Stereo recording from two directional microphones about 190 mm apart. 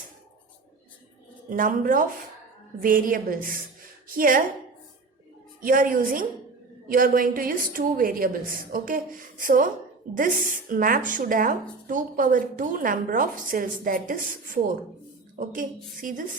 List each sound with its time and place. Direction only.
1.5 s a woman's voice: 45° right (ahead or behind)
5.6 s a woman's voice: 45° right (ahead or behind)